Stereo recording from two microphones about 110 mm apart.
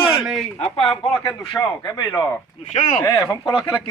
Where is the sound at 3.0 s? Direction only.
30° left (ahead or behind).